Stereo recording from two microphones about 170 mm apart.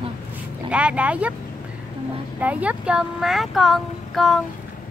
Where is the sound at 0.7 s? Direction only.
5° right (ahead or behind).